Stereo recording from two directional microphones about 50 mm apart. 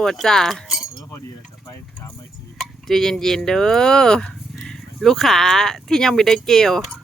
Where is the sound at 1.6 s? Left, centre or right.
Left.